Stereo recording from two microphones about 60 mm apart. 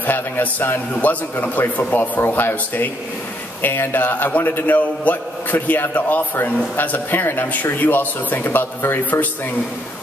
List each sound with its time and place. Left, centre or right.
0.0 s a man's voice: left